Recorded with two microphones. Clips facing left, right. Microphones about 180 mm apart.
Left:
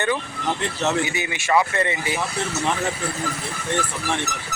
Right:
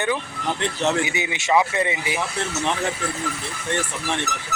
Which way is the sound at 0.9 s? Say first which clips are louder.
Even; 15° right (ahead or behind).